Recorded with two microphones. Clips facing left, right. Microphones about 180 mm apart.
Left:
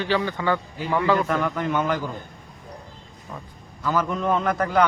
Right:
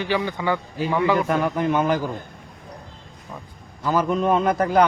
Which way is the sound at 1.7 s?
30° right (ahead or behind).